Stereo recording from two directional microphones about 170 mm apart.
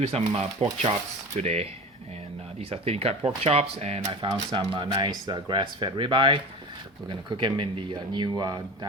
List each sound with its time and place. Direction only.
0.0 s speech: 35° right (ahead or behind)
4.0 s speech: 25° right (ahead or behind)